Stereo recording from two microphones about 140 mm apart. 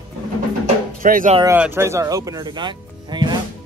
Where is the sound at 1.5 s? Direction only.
15° right (ahead or behind).